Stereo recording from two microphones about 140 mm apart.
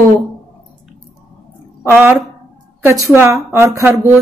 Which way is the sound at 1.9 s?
15° right (ahead or behind).